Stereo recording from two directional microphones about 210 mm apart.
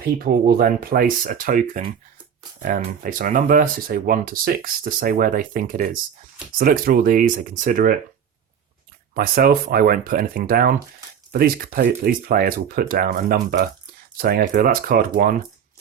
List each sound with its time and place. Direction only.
0.0 s speech: 45° right (ahead or behind)
9.1 s speech: 45° right (ahead or behind)